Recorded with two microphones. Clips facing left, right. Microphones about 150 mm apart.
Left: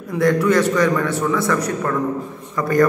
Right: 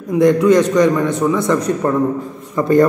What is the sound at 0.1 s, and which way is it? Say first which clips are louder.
A man's voice: right 5 dB; 20° right (ahead or behind).